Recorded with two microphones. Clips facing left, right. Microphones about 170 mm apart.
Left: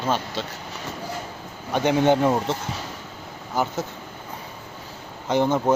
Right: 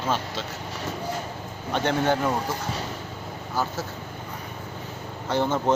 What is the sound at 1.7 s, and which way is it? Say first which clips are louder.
Speech: left 4 dB; 15° left (ahead or behind).